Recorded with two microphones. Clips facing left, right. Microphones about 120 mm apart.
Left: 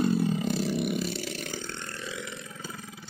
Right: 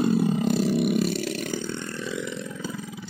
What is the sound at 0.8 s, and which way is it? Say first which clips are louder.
Roar: right 7 dB; 60° right (ahead or behind).